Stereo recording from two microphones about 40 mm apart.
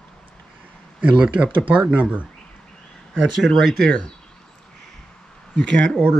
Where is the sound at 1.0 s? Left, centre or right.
Right.